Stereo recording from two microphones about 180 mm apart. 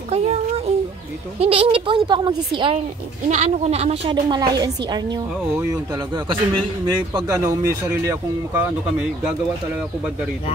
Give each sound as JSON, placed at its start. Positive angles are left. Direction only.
{"t": 0.1, "sound": "a sound", "side_deg": -35}
{"t": 1.4, "sound": "a woman's voice", "side_deg": -30}
{"t": 3.3, "sound": "a woman's voice", "side_deg": -40}